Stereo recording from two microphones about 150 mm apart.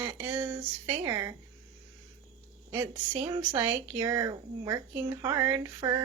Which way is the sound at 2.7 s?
15° right (ahead or behind).